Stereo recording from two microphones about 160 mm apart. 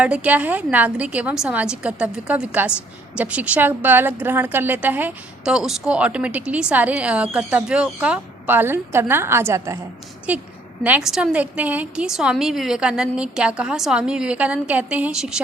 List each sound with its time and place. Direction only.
0.0 s a woman's voice: 5° right (ahead or behind)